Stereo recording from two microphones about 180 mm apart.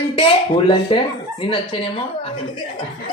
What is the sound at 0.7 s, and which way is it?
Speech, 25° left (ahead or behind).